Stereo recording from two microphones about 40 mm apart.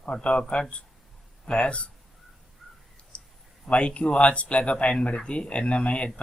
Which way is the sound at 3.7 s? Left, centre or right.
Left.